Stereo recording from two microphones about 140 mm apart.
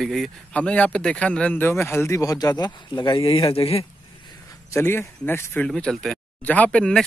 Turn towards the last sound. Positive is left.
turn(degrees=5)  # may be behind; listen again after turning